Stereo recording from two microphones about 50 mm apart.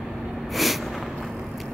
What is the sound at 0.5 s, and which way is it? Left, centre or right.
Snort, centre.